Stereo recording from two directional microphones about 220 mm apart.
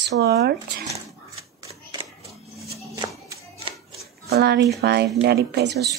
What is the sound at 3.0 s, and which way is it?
Music, 15° right (ahead or behind).